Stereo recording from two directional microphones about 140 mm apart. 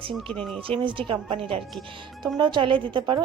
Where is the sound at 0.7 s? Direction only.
35° right (ahead or behind).